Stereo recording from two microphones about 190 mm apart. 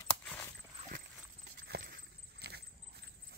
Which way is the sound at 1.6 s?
55° right (ahead or behind).